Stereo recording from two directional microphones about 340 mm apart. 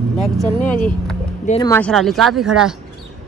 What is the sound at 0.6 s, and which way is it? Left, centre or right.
Speech, centre.